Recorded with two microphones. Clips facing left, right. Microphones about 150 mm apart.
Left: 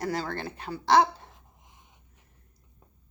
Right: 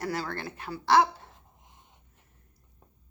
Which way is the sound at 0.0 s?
20° left (ahead or behind).